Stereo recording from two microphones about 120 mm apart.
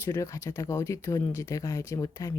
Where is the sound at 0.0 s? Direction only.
25° left (ahead or behind).